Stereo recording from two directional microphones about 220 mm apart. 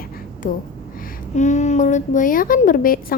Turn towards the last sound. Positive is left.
turn(degrees=40)  # may be behind; listen again after turning